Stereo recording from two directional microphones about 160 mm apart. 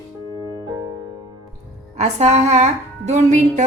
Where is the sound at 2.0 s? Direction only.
45° right (ahead or behind).